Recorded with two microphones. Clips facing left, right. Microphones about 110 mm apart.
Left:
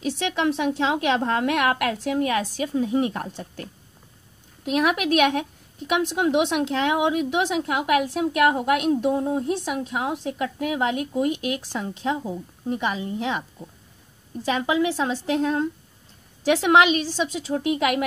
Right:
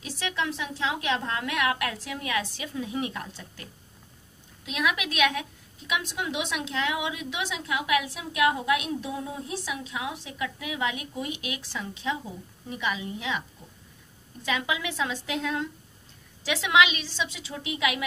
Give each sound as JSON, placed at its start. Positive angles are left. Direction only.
{"t": 0.0, "sound": "a woman's voice", "side_deg": 60}
{"t": 4.6, "sound": "a woman's voice", "side_deg": 50}
{"t": 16.4, "sound": "a woman's voice", "side_deg": 50}